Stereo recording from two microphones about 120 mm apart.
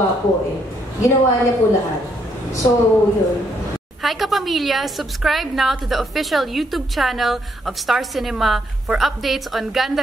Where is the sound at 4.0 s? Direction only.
Centre (ahead or behind).